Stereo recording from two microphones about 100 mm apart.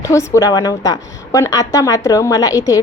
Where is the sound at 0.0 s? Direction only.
30° left (ahead or behind).